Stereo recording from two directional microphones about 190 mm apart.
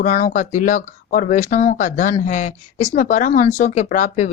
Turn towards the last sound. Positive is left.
turn(degrees=40)  # may be behind; listen again after turning